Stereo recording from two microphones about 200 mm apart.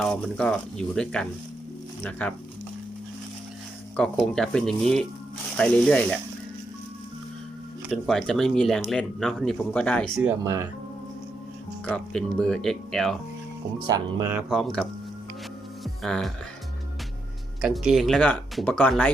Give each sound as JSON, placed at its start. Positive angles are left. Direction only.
{"t": 0.0, "sound": "speech", "side_deg": 5}
{"t": 3.9, "sound": "speech", "side_deg": 5}
{"t": 7.9, "sound": "speech", "side_deg": 0}
{"t": 10.2, "sound": "speech", "side_deg": -15}
{"t": 11.9, "sound": "speech", "side_deg": 5}
{"t": 13.8, "sound": "speech", "side_deg": -20}
{"t": 14.3, "sound": "speech", "side_deg": 0}
{"t": 15.8, "sound": "music", "side_deg": 0}
{"t": 17.6, "sound": "speech", "side_deg": 0}